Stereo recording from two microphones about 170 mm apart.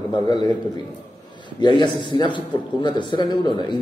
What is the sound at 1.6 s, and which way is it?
A man's voice, 25° left (ahead or behind).